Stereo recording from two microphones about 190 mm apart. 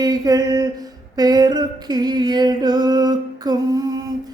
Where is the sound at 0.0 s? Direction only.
20° right (ahead or behind).